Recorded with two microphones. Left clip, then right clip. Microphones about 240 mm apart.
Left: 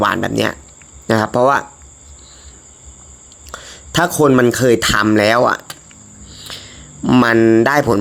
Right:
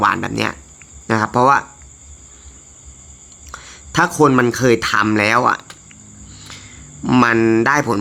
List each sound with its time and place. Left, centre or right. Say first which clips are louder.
0.0 s speech: left 1 dB; centre
3.5 s speech: left 1 dB; centre